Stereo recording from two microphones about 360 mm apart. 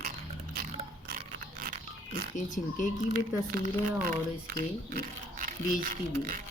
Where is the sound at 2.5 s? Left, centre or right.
Left.